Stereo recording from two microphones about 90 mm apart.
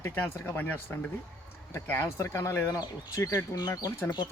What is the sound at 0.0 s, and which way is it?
Speech, 25° left (ahead or behind).